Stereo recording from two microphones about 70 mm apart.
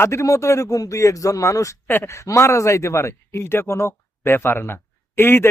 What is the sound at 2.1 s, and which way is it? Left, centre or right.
Speech, left.